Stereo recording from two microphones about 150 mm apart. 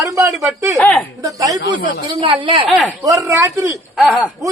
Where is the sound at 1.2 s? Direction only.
25° right (ahead or behind).